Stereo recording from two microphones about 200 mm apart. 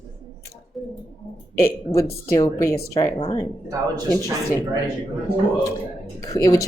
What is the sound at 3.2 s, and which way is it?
Speech, 25° left (ahead or behind).